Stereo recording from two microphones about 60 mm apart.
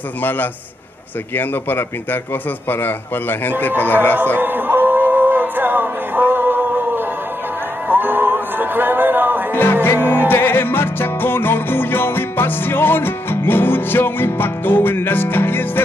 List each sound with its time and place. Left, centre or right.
0.2 s a man's voice: left
4.4 s music: right
9.5 s music: left